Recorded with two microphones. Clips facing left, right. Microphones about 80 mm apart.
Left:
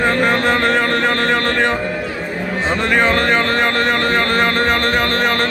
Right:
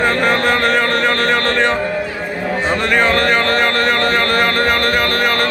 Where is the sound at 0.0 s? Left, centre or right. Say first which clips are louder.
Right 1 dB; centre.